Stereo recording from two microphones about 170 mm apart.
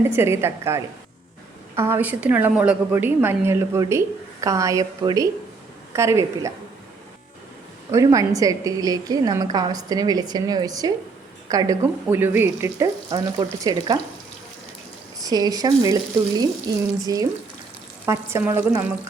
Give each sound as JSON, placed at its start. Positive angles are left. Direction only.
{"t": 0.0, "sound": "a woman's voice", "side_deg": -15}
{"t": 7.9, "sound": "a woman's voice", "side_deg": -20}
{"t": 15.2, "sound": "a woman's voice", "side_deg": -20}